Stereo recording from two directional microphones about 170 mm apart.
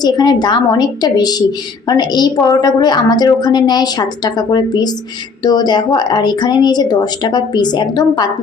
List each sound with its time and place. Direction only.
0.0 s a woman's voice: 25° left (ahead or behind)